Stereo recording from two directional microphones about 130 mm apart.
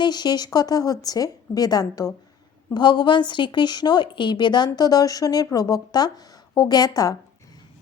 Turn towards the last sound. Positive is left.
turn(degrees=30)  # may be behind; listen again after turning